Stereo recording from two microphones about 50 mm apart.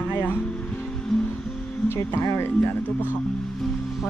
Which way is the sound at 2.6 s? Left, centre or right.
Left.